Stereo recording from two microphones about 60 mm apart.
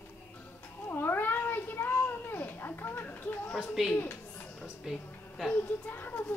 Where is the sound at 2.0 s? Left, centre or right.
Left.